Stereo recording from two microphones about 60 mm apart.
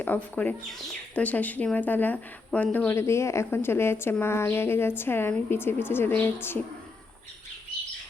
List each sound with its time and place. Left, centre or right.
0.1 s a woman's voice: left
2.9 s a woman's voice: left